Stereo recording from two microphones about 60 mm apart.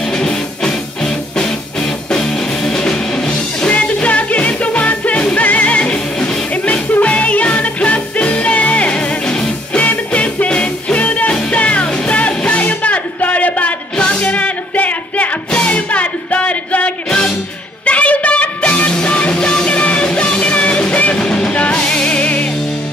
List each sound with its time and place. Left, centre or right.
0.1 s music: centre
3.6 s music: left